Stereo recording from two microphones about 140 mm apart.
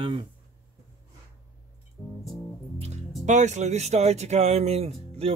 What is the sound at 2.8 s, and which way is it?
Speech, 55° right (ahead or behind).